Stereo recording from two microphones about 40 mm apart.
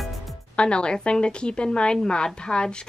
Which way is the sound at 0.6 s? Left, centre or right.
Left.